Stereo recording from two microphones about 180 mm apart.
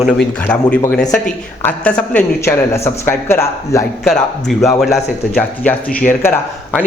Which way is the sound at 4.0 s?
5° left (ahead or behind).